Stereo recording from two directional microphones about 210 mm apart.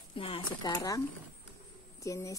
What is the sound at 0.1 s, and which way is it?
A woman's voice, 25° left (ahead or behind).